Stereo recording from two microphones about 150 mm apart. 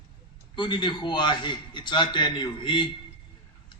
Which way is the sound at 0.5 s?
30° left (ahead or behind).